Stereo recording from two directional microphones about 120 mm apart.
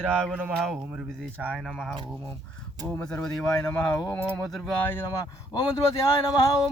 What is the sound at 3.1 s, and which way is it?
Speech, 5° left (ahead or behind).